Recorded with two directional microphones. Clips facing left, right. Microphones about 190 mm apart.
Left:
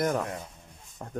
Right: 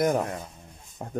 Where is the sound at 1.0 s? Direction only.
15° right (ahead or behind).